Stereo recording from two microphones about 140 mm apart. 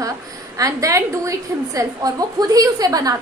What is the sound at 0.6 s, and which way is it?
A woman's voice, 25° right (ahead or behind).